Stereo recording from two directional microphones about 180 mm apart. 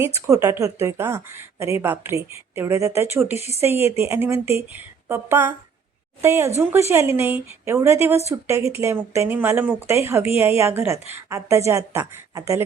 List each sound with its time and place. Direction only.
0.0 s a woman's voice: 15° right (ahead or behind)